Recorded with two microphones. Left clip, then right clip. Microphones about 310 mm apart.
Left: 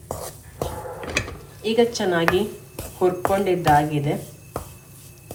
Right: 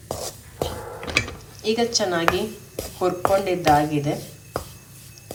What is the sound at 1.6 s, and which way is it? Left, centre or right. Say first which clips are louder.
A woman's voice: left 2 dB; centre.